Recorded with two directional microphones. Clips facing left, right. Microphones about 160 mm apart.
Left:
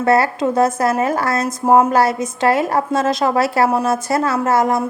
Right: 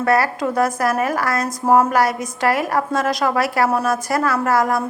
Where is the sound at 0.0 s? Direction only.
25° left (ahead or behind).